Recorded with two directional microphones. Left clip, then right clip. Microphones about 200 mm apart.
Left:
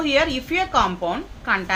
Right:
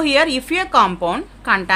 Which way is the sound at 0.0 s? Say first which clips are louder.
Right 4 dB; 55° right (ahead or behind).